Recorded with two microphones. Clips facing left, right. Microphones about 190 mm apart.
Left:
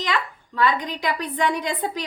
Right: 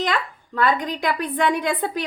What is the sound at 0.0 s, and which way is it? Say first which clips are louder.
A woman's voice: right 2 dB; 50° right (ahead or behind).